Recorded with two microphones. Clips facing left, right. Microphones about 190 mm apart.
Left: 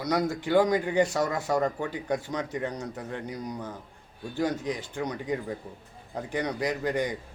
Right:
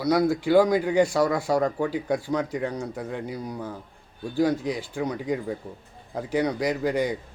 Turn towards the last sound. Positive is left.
turn(degrees=-10)  # may be behind; listen again after turning